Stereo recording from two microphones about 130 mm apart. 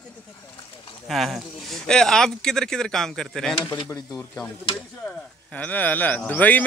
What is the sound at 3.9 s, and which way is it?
Speech, 20° left (ahead or behind).